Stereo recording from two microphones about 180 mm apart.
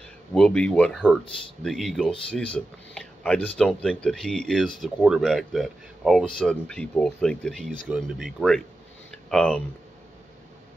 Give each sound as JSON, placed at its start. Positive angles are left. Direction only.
{"t": 0.3, "sound": "speech", "side_deg": 5}